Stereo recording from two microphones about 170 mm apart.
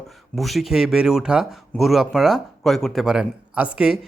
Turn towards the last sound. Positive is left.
turn(degrees=-5)  # may be behind; listen again after turning